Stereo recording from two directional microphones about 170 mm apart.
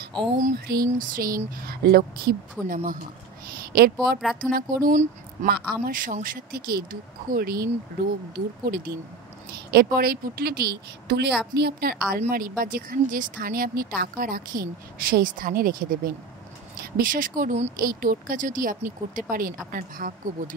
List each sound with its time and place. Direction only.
0.4 s speech: 55° right (ahead or behind)
3.7 s speech: 65° right (ahead or behind)
12.1 s speech: 55° right (ahead or behind)